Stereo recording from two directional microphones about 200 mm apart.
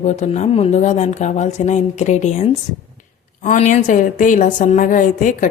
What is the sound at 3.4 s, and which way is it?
Speech, 40° left (ahead or behind).